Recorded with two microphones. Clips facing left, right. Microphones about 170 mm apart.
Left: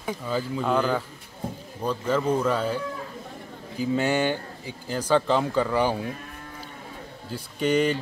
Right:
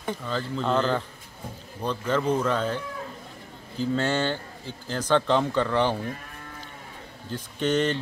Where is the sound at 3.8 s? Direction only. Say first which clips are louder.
Left 2 dB; 10° left (ahead or behind).